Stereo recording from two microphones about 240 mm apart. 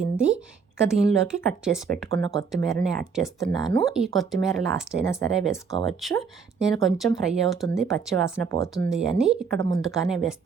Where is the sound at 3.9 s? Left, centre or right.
Centre.